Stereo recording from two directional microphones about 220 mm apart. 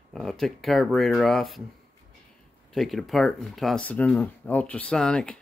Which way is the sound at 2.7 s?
Centre (ahead or behind).